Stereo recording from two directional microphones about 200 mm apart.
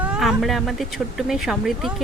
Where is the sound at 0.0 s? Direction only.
5° right (ahead or behind).